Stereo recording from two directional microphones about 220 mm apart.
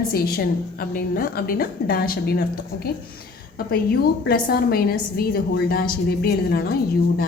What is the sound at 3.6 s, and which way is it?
A woman's voice, 45° left (ahead or behind).